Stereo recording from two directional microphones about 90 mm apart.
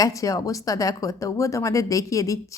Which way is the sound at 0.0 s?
40° left (ahead or behind).